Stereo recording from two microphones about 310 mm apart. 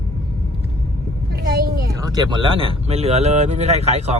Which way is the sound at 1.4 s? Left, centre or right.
Right.